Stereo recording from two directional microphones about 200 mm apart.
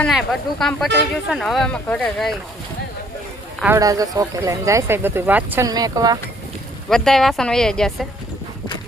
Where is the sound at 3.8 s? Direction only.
15° right (ahead or behind).